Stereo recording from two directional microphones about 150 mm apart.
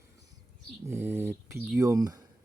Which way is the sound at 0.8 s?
15° right (ahead or behind).